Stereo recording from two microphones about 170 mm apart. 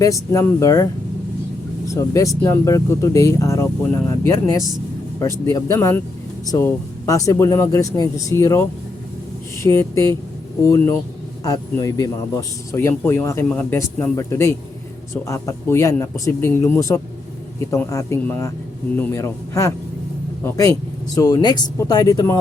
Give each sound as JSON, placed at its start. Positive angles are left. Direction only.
{"t": 0.0, "sound": "speech", "side_deg": 20}
{"t": 1.9, "sound": "speech", "side_deg": 20}
{"t": 9.6, "sound": "speech", "side_deg": 15}
{"t": 11.4, "sound": "speech", "side_deg": 20}